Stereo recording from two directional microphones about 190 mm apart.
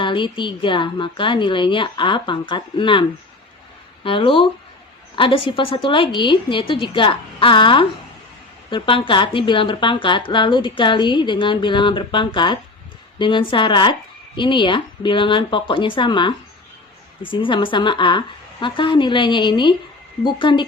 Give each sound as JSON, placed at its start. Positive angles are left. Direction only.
{"t": 0.0, "sound": "a woman's voice", "side_deg": 25}